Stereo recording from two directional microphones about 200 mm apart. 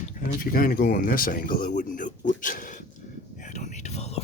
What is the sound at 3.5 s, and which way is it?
Whispering, 35° left (ahead or behind).